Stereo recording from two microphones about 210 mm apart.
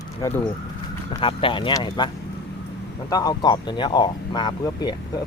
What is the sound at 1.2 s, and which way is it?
Speech, 25° left (ahead or behind).